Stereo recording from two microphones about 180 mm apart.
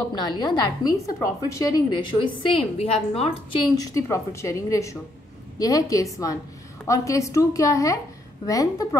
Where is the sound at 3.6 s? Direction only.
20° left (ahead or behind).